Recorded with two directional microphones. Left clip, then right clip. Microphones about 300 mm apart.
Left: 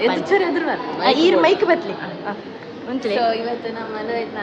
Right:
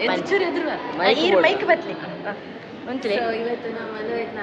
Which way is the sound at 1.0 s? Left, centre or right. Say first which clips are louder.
Left 2 dB; centre.